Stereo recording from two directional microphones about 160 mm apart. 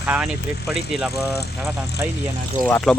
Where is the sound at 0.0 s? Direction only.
10° right (ahead or behind).